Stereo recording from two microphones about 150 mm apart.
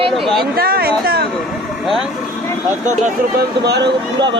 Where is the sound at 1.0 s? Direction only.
90° right.